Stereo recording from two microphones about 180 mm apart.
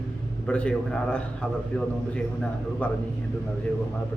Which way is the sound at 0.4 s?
5° left (ahead or behind).